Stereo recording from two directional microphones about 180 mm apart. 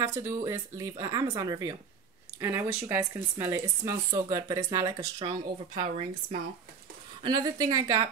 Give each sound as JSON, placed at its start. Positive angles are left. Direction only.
{"t": 0.0, "sound": "a woman's voice", "side_deg": -15}
{"t": 7.2, "sound": "a woman's voice", "side_deg": -25}